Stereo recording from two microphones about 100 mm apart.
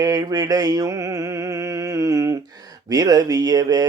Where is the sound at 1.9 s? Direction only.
35° right (ahead or behind).